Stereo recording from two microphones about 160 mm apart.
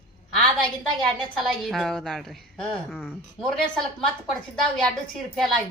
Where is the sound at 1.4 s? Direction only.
Centre (ahead or behind).